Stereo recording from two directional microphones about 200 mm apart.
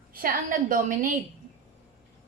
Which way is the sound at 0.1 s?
45° right (ahead or behind).